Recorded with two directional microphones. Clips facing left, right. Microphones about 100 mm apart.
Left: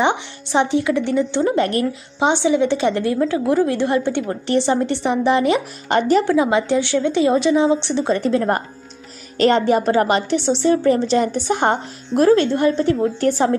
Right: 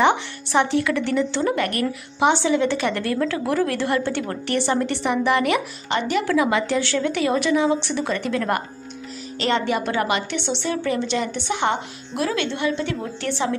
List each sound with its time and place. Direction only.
0.0 s a woman's voice: 20° left (ahead or behind)
1.4 s a woman's voice: 30° left (ahead or behind)
5.9 s a woman's voice: 40° left (ahead or behind)
6.2 s a woman's voice: 25° left (ahead or behind)